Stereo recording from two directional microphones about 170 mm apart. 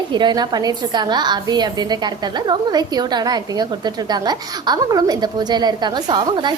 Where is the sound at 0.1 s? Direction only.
25° right (ahead or behind).